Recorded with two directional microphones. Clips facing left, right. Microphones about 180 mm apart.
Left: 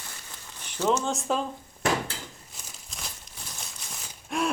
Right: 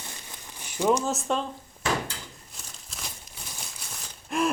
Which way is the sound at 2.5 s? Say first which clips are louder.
Even; centre (ahead or behind).